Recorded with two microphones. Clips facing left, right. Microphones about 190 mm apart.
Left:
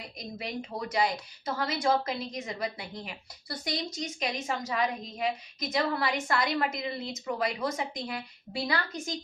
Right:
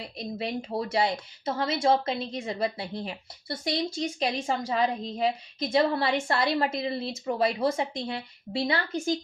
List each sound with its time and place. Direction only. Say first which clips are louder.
0.2 s a woman's voice: right 5 dB; 30° right (ahead or behind)